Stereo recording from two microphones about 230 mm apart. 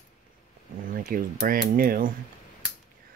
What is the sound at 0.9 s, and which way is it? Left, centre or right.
Speech, right.